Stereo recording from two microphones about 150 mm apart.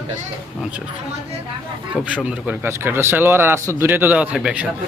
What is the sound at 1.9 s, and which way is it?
Speech, 10° right (ahead or behind).